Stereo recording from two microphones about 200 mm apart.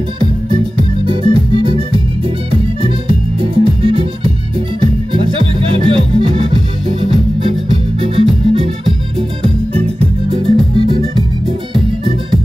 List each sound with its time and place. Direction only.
0.7 s music: 25° right (ahead or behind)
9.4 s music: 30° right (ahead or behind)